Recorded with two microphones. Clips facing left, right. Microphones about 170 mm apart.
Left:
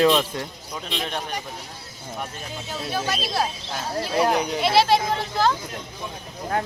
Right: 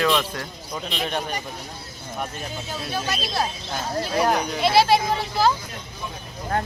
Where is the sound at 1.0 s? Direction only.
Centre (ahead or behind).